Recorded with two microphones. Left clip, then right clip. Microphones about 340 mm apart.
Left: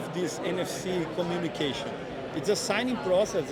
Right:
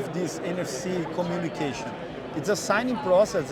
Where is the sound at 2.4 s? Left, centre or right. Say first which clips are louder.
Right 3 dB; centre.